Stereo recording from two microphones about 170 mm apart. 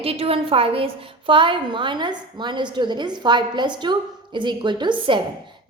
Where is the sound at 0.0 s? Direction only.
35° right (ahead or behind).